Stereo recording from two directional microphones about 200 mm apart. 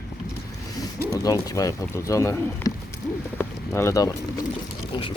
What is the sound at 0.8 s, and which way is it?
Speech, 15° left (ahead or behind).